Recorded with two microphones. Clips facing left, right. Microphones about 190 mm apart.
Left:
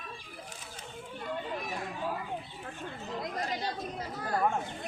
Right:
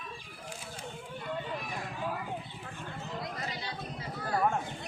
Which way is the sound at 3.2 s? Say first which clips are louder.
Left 6 dB; 50° left (ahead or behind).